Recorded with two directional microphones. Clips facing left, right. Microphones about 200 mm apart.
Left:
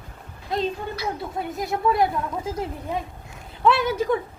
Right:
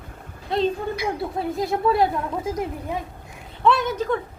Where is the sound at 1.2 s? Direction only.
30° right (ahead or behind).